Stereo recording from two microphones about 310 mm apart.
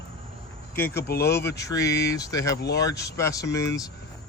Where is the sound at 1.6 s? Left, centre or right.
Centre.